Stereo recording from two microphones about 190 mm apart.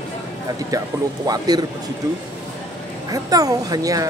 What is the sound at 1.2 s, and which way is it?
Speech, 20° right (ahead or behind).